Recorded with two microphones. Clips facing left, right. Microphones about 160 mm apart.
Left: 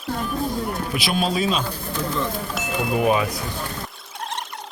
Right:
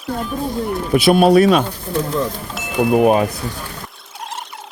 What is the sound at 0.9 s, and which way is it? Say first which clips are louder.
Speech: right 14 dB; 55° right (ahead or behind).